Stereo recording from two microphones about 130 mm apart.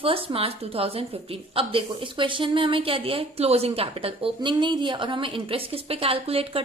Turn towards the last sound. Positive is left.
turn(degrees=-45)  # may be behind; listen again after turning